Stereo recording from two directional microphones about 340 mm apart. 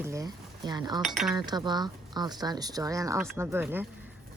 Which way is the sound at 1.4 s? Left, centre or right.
Centre.